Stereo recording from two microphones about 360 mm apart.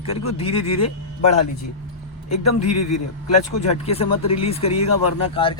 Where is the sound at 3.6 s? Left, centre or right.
Centre.